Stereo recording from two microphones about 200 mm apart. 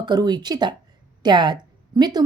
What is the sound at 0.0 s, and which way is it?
A woman's voice, 20° right (ahead or behind).